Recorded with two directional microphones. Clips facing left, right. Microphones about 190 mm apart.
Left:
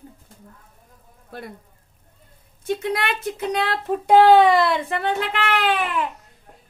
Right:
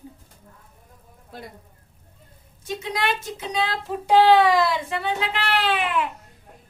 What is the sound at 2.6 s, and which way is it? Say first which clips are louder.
Speech: left 3 dB; 55° left (ahead or behind).